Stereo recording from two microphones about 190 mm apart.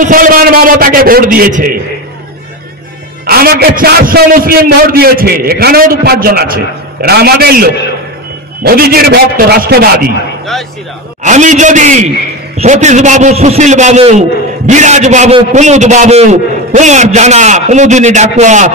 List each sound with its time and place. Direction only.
0.0 s a man's voice: 45° right (ahead or behind)
3.3 s a man's voice: 50° right (ahead or behind)
11.2 s a man's voice: 40° right (ahead or behind)